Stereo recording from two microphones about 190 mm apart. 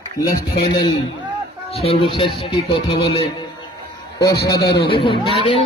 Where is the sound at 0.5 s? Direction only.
25° left (ahead or behind).